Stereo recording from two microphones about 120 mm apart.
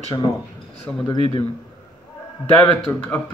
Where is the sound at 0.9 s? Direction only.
15° left (ahead or behind).